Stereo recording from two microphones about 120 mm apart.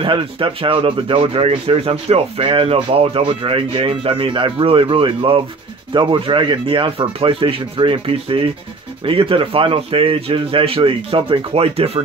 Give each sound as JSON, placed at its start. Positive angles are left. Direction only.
{"t": 0.0, "sound": "speech", "side_deg": -45}